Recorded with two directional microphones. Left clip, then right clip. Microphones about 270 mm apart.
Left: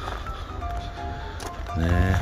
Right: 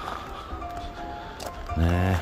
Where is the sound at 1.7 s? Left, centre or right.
Centre.